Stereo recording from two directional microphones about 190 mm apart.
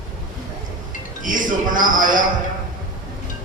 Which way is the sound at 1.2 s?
45° right (ahead or behind).